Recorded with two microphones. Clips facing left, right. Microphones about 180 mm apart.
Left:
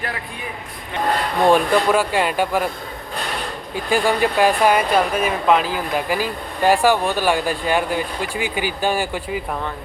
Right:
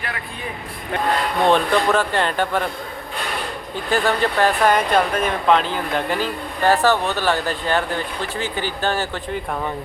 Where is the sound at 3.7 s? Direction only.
10° left (ahead or behind).